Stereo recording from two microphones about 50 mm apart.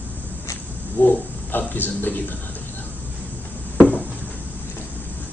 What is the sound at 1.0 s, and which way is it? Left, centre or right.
Speech, left.